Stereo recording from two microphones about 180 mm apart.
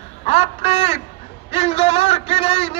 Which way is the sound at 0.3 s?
35° left (ahead or behind).